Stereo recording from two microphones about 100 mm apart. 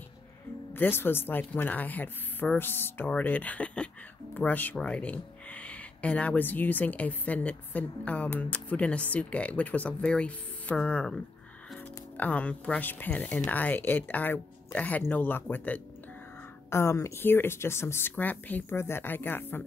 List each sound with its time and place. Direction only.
0.7 s speech: 20° left (ahead or behind)
12.2 s speech: 15° left (ahead or behind)
16.7 s speech: 25° left (ahead or behind)